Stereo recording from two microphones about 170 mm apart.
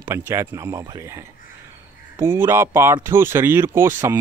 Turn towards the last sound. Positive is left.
turn(degrees=-15)  # may be behind; listen again after turning